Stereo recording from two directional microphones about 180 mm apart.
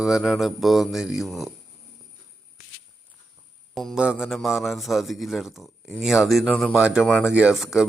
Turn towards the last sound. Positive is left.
turn(degrees=0)  # may be behind; listen again after turning